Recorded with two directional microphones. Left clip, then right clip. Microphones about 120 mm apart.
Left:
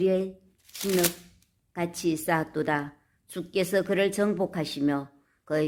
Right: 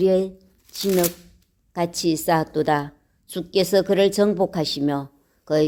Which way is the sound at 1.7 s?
45° right (ahead or behind).